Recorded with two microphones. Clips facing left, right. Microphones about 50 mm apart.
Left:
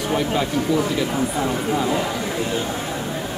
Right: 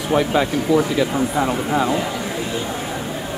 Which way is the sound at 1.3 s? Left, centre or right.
Right.